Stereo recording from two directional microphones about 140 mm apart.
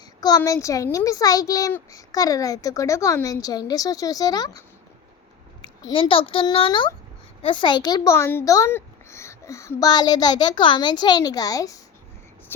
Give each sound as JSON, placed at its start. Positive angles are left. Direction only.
{"t": 0.2, "sound": "a child's voice", "side_deg": 30}
{"t": 5.9, "sound": "a child's voice", "side_deg": 40}
{"t": 12.5, "sound": "speech", "side_deg": 15}